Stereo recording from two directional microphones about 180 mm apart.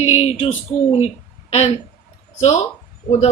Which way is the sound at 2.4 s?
35° left (ahead or behind).